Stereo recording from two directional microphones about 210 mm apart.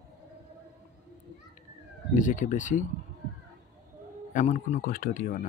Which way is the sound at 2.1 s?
35° left (ahead or behind).